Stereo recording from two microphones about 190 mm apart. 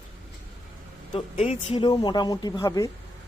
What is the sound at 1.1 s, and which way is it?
Speech, 35° left (ahead or behind).